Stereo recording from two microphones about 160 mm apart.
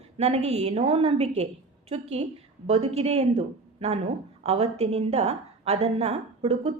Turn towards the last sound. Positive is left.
turn(degrees=-40)  # may be behind; listen again after turning